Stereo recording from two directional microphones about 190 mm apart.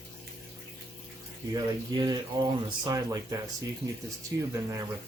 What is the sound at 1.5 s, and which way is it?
Speech, 20° right (ahead or behind).